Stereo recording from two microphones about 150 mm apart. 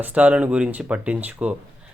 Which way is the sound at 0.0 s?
10° right (ahead or behind).